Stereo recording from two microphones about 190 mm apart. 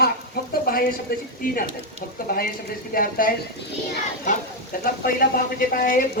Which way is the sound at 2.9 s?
50° left (ahead or behind).